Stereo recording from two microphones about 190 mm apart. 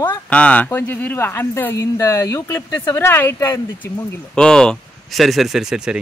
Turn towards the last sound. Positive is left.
turn(degrees=0)  # may be behind; listen again after turning